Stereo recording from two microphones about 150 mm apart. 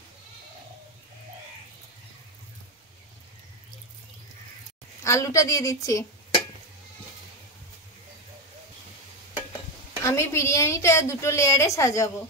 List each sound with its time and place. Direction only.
5.0 s a woman's voice: 20° left (ahead or behind)
10.0 s a woman's voice: 20° left (ahead or behind)